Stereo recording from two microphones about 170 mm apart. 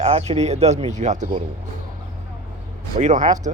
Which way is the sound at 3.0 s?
45° right (ahead or behind).